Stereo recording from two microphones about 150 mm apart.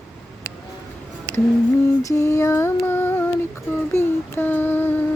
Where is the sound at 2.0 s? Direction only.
20° left (ahead or behind).